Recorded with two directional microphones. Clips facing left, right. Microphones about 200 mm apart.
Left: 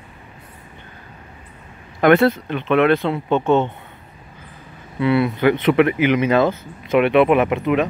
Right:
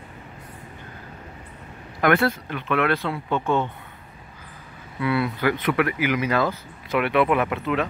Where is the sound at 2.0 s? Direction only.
25° left (ahead or behind).